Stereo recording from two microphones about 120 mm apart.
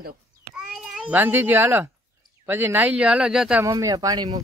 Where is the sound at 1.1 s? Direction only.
15° right (ahead or behind).